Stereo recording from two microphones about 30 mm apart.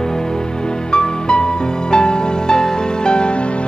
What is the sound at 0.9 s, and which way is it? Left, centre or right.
Music, left.